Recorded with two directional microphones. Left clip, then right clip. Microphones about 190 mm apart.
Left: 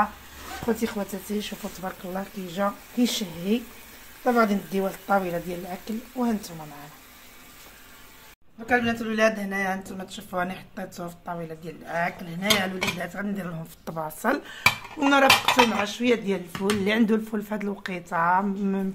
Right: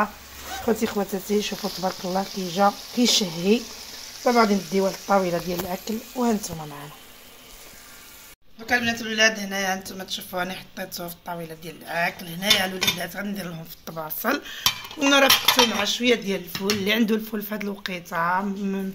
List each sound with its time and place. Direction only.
0.7 s speech: 45° right (ahead or behind)
9.0 s speech: 35° left (ahead or behind); by 18.9 s 10° left (ahead or behind)